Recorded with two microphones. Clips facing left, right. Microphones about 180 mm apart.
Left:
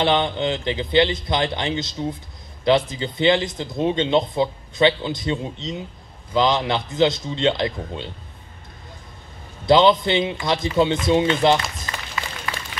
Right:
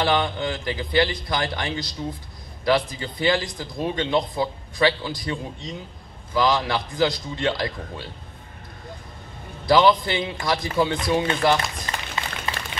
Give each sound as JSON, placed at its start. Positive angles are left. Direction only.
{"t": 0.0, "sound": "speech", "side_deg": 25}
{"t": 9.7, "sound": "speech", "side_deg": 20}
{"t": 11.9, "sound": "a sound", "side_deg": -25}